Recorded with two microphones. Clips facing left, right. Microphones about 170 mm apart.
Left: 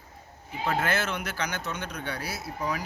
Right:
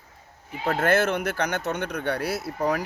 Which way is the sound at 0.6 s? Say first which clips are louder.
Right 6 dB; 50° right (ahead or behind).